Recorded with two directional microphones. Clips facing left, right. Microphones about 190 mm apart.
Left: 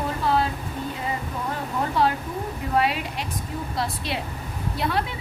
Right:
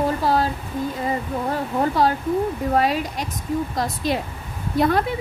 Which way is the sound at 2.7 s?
40° right (ahead or behind).